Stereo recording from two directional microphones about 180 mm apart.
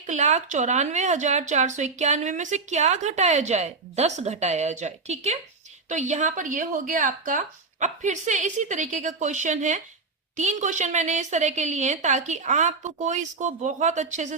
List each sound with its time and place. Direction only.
0.0 s speech: 40° right (ahead or behind)